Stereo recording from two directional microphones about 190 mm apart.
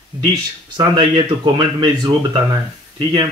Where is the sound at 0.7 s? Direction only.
20° right (ahead or behind).